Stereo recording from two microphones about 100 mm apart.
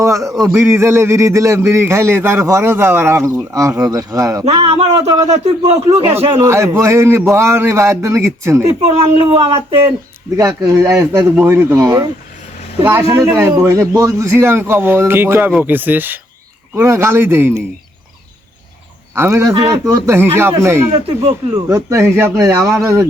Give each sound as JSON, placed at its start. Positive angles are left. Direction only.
{"t": 0.0, "sound": "a sound", "side_deg": -30}
{"t": 0.4, "sound": "a man's voice", "side_deg": -30}
{"t": 4.5, "sound": "speech", "side_deg": -60}
{"t": 5.3, "sound": "speech", "side_deg": -90}
{"t": 6.1, "sound": "a man's voice", "side_deg": -30}
{"t": 8.8, "sound": "speech", "side_deg": -75}
{"t": 10.7, "sound": "speech", "side_deg": -30}
{"t": 11.3, "sound": "a man's voice", "side_deg": -20}
{"t": 13.1, "sound": "a man's voice", "side_deg": -30}
{"t": 19.1, "sound": "a man's voice", "side_deg": -25}